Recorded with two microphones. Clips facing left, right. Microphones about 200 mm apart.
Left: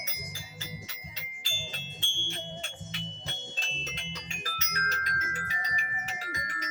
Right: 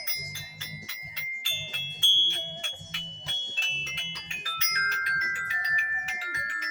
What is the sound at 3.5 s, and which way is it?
Music, 45° left (ahead or behind).